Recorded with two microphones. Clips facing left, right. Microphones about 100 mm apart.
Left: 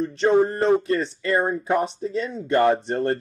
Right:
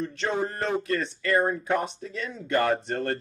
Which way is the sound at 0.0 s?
30° left (ahead or behind).